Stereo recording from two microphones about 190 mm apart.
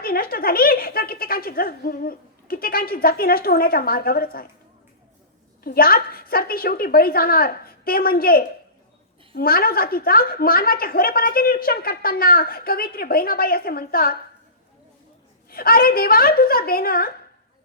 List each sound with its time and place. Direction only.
0.0 s a woman's voice: 50° left (ahead or behind)
5.6 s a woman's voice: 50° left (ahead or behind)
15.4 s a woman's voice: 50° left (ahead or behind)